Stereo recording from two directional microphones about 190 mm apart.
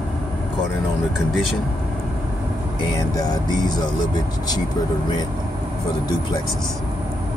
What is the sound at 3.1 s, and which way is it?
Vehicle, 20° left (ahead or behind).